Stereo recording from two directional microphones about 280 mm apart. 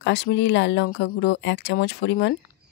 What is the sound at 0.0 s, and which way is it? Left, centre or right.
Speech, left.